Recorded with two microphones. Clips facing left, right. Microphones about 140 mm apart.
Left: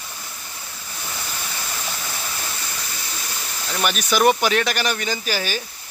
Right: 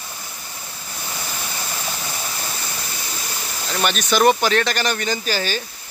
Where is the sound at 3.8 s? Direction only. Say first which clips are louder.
Right 1 dB; 5° left (ahead or behind).